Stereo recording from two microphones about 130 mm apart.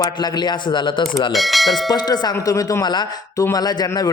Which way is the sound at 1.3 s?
Centre (ahead or behind).